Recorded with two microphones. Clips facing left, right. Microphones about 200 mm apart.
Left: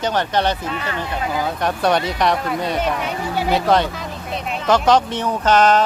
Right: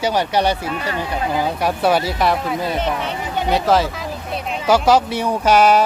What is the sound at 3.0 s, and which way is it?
Music, 10° left (ahead or behind).